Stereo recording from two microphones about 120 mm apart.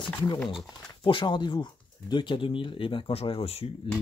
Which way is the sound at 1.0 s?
40° left (ahead or behind).